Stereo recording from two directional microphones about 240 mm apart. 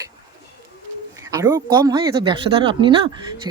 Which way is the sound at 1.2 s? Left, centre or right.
Centre.